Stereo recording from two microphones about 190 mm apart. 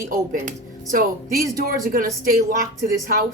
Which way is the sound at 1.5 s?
50° right (ahead or behind).